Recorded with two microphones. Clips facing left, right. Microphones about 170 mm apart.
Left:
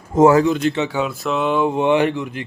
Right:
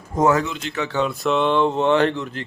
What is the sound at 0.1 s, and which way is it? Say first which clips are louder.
Speech: left 6 dB; 30° left (ahead or behind).